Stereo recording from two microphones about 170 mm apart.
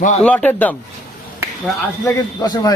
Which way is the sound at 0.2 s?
10° left (ahead or behind).